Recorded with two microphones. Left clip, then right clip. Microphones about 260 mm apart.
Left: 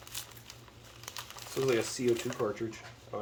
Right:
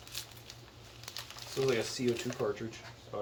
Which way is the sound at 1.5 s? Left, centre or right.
Centre.